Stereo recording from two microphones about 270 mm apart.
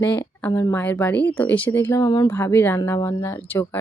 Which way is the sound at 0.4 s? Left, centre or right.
Centre.